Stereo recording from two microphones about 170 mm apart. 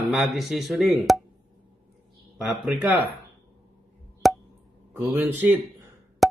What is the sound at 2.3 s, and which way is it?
Speech, centre (ahead or behind).